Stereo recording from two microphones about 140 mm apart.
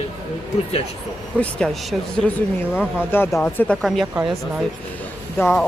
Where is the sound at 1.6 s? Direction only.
5° left (ahead or behind).